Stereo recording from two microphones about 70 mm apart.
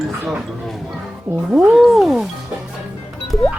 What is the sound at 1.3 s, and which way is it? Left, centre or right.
Speech, centre.